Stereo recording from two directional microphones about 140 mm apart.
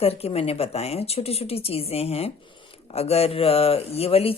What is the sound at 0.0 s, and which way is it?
Speech, 45° left (ahead or behind).